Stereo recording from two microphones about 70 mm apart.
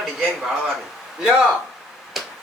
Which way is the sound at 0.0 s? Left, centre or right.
Centre.